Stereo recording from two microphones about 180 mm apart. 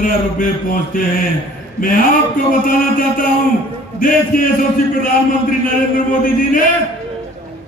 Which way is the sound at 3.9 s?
50° left (ahead or behind).